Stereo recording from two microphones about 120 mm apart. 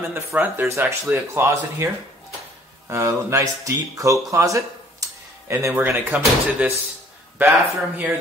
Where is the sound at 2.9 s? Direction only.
20° right (ahead or behind).